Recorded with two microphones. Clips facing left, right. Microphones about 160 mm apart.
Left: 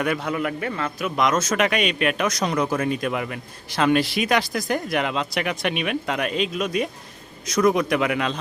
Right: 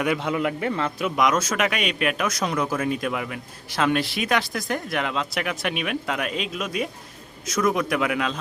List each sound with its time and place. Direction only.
0.0 s a man's voice: 20° right (ahead or behind)
1.1 s speech: 10° right (ahead or behind)